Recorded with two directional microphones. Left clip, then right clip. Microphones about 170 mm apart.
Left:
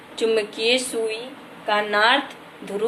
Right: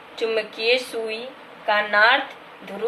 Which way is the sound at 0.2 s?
20° left (ahead or behind).